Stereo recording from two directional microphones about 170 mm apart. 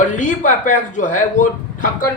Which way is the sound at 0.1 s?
50° left (ahead or behind).